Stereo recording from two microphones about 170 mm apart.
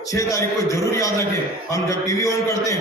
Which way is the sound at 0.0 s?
20° left (ahead or behind).